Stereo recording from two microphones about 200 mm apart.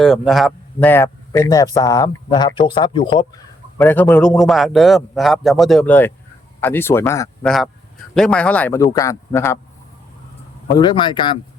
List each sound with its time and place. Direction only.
0.0 s speech: centre (ahead or behind); by 3.2 s 25° left (ahead or behind)
3.8 s a man's voice: 10° left (ahead or behind)
7.4 s a man's voice: centre (ahead or behind)
10.7 s speech: 20° left (ahead or behind)